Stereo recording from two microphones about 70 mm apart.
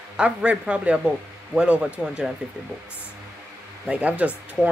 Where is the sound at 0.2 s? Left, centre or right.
Centre.